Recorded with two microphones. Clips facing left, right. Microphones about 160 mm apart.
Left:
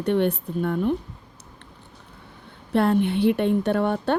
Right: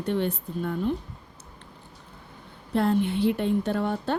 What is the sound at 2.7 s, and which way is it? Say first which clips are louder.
Speech: left 3 dB; 65° left (ahead or behind).